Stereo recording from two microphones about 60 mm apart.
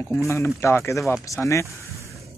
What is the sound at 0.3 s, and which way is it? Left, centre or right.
Speech, left.